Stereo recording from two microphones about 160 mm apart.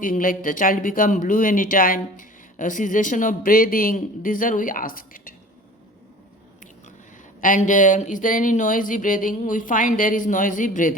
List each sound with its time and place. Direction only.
0.0 s speech: 60° left (ahead or behind)
7.4 s speech: 55° left (ahead or behind)